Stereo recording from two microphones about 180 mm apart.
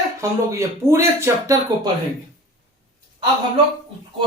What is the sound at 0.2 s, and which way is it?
Speech, 15° right (ahead or behind).